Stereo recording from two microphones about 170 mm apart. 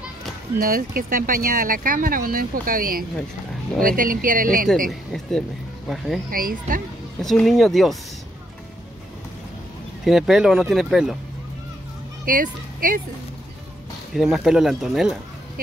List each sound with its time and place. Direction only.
0.6 s speech: 60° right (ahead or behind)
5.9 s speech: centre (ahead or behind)
6.3 s speech: 55° right (ahead or behind)
7.2 s speech: centre (ahead or behind)
10.0 s speech: 5° right (ahead or behind)
12.3 s speech: 55° right (ahead or behind)
14.1 s speech: centre (ahead or behind)